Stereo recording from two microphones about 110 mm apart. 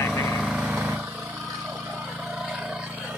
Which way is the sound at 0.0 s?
20° left (ahead or behind).